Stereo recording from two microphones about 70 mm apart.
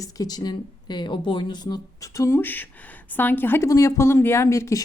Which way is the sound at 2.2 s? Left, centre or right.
Left.